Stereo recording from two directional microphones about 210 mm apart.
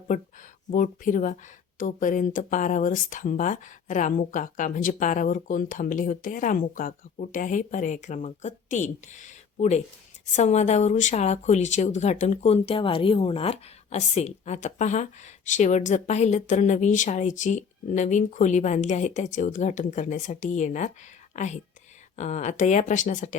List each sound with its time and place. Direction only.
0.1 s speech: 40° left (ahead or behind)